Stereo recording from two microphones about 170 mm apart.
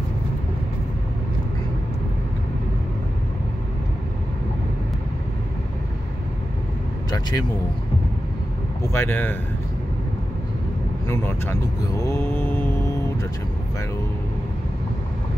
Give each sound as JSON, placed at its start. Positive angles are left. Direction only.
{"t": 7.1, "sound": "speech", "side_deg": 25}
{"t": 8.8, "sound": "speech", "side_deg": 15}
{"t": 11.1, "sound": "speech", "side_deg": 15}
{"t": 12.0, "sound": "mantra", "side_deg": 15}